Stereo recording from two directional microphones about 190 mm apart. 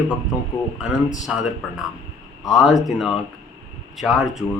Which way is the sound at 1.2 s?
Centre (ahead or behind).